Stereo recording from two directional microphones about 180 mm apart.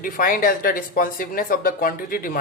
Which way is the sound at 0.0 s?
50° left (ahead or behind).